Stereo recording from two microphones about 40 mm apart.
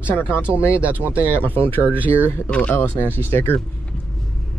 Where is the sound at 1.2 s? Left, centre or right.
Left.